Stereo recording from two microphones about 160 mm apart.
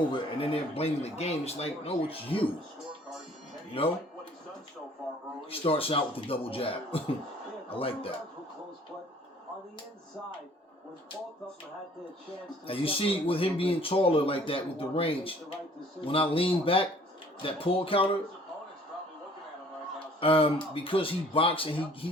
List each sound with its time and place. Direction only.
0.1 s speech: 35° left (ahead or behind)
3.8 s speech: 35° left (ahead or behind)
5.5 s speech: 35° left (ahead or behind)
12.6 s speech: 35° left (ahead or behind)
20.1 s speech: 35° left (ahead or behind)